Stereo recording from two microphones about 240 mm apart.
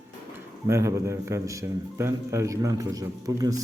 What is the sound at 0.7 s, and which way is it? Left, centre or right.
A man's voice, centre.